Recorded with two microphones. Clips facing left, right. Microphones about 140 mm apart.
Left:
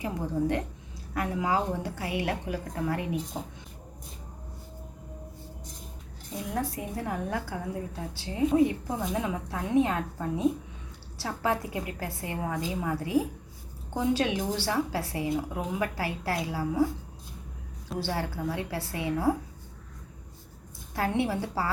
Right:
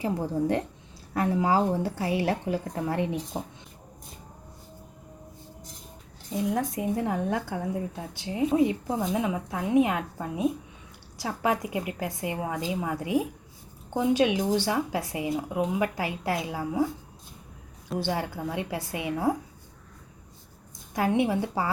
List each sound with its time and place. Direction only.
0.0 s a woman's voice: 30° right (ahead or behind)
6.3 s a woman's voice: 20° right (ahead or behind)
18.0 s speech: 15° right (ahead or behind)
20.9 s speech: 15° right (ahead or behind)